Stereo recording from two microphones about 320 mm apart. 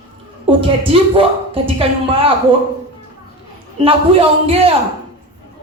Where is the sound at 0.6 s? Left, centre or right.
Centre.